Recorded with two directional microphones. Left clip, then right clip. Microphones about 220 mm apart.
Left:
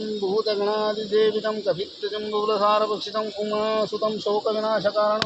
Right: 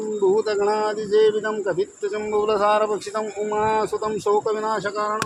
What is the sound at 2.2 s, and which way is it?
Speech, 60° right (ahead or behind).